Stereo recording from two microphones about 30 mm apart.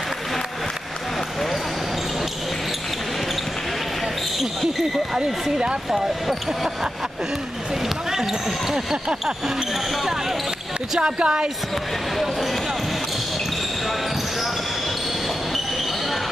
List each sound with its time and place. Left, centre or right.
5.1 s speech: right
5.9 s speech: centre
11.0 s speech: right